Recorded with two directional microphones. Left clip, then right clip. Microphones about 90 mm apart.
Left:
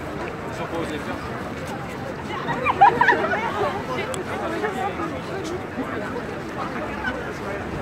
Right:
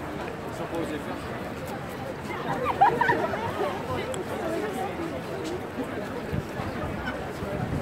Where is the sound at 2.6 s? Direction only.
30° right (ahead or behind).